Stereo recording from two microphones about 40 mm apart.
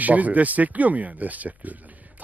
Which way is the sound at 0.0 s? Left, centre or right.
Right.